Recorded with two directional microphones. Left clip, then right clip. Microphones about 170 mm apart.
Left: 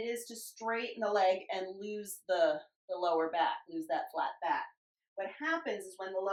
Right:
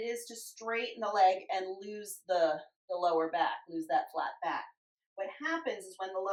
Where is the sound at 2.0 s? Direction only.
20° left (ahead or behind).